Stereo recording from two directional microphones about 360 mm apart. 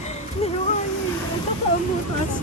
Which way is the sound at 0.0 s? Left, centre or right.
Centre.